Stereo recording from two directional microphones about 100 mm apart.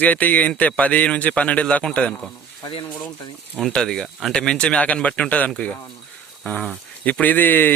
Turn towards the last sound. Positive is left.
turn(degrees=20)  # may be behind; listen again after turning